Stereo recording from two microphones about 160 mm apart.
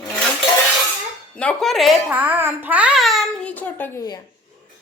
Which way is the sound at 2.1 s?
10° right (ahead or behind).